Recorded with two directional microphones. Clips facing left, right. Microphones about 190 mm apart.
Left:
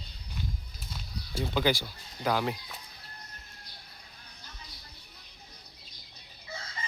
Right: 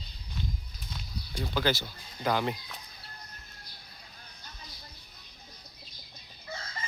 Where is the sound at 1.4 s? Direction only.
15° left (ahead or behind).